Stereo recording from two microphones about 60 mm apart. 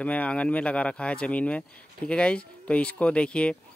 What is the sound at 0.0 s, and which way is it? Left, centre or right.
Speech, left.